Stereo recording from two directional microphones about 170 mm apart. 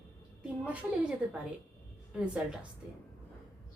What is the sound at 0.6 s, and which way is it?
Speech, 10° right (ahead or behind).